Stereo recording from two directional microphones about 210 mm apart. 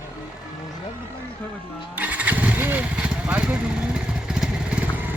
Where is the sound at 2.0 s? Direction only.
5° right (ahead or behind).